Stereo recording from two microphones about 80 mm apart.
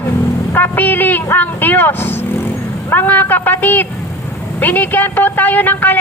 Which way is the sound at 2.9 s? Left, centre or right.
Left.